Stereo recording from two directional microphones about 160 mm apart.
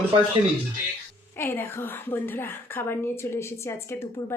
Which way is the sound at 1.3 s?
15° left (ahead or behind).